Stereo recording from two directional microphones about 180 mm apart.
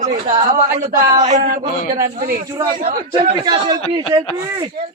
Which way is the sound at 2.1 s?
50° right (ahead or behind).